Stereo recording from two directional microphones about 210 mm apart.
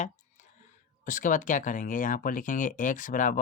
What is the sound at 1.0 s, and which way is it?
Speech, 40° left (ahead or behind).